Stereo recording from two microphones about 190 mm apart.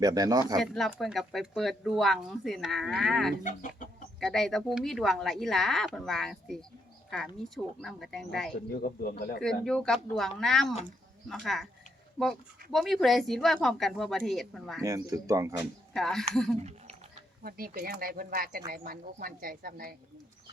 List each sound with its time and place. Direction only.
0.0 s speech: 20° right (ahead or behind)
0.6 s speech: centre (ahead or behind)
3.4 s speech: 40° left (ahead or behind)
4.2 s speech: centre (ahead or behind)
8.8 s speech: 50° left (ahead or behind)
9.4 s speech: 5° left (ahead or behind)
12.7 s speech: centre (ahead or behind)
14.8 s speech: 15° right (ahead or behind)
15.9 s speech: 5° left (ahead or behind)
16.6 s a sound: 35° right (ahead or behind)
17.4 s speech: 50° right (ahead or behind)